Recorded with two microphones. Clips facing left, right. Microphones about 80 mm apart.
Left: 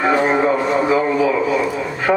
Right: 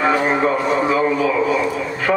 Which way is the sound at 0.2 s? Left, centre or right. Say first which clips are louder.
Left 2 dB; centre.